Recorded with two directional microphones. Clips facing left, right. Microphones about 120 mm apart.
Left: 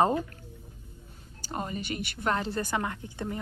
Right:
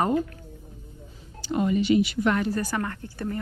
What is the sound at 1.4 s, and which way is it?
Speech, 40° left (ahead or behind).